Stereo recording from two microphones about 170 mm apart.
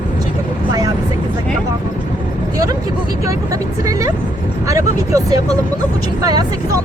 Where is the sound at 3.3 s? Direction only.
20° right (ahead or behind).